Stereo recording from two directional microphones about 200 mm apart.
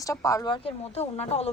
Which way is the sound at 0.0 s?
15° left (ahead or behind).